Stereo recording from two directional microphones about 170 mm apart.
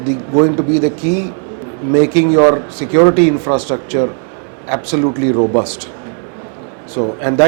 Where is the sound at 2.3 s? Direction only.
30° right (ahead or behind).